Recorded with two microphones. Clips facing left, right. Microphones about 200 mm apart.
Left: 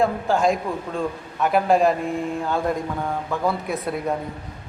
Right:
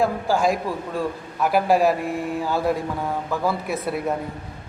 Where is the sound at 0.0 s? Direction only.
Centre (ahead or behind).